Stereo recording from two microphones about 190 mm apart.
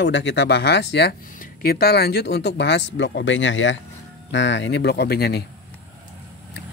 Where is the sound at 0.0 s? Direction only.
70° left (ahead or behind); by 5.4 s 55° left (ahead or behind).